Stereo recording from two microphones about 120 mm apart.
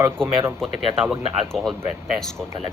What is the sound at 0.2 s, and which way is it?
Speech, 5° left (ahead or behind).